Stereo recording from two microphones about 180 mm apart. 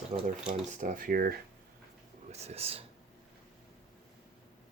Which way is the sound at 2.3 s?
35° right (ahead or behind).